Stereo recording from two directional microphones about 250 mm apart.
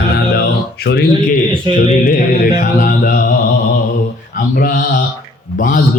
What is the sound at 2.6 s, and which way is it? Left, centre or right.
Speech, left.